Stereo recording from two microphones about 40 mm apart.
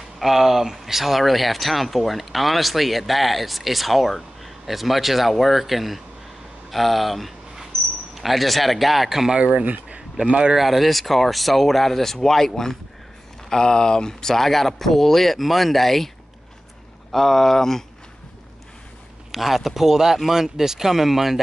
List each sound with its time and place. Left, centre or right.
0.2 s speech: centre
9.3 s speech: right
10.5 s speech: centre
14.3 s speech: centre
17.1 s speech: centre
19.3 s speech: centre